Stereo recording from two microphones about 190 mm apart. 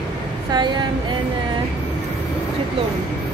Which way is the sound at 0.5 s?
25° right (ahead or behind).